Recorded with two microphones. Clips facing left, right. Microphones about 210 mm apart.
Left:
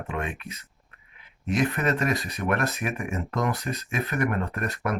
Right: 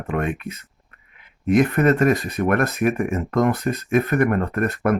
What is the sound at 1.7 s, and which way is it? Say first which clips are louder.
Speech: right 9 dB; 45° right (ahead or behind).